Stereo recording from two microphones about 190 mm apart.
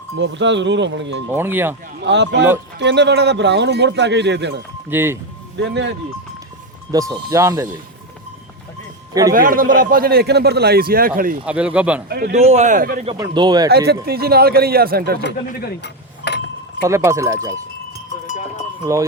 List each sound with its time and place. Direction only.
0.2 s speech: 70° right (ahead or behind)
1.3 s speech: 10° right (ahead or behind)
2.0 s a man's voice: 70° right (ahead or behind)
4.9 s speech: 10° right (ahead or behind)
5.5 s speech: 65° right (ahead or behind)
7.1 s speech: 15° right (ahead or behind)
9.3 s a man's voice: 45° right (ahead or behind)
11.4 s speech: 5° right (ahead or behind)
12.0 s a man's voice: 55° right (ahead or behind)
12.3 s speech: 35° right (ahead or behind)
13.1 s speech: 20° right (ahead or behind)
13.7 s a man's voice: 55° right (ahead or behind)
15.2 s a sound: 60° left (ahead or behind)
16.8 s speech: 15° right (ahead or behind)